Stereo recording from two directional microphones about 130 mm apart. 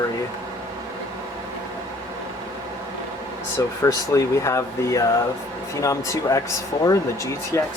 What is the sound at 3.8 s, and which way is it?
Speech, 25° left (ahead or behind).